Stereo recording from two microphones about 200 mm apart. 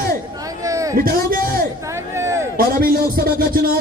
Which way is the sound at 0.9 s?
45° right (ahead or behind).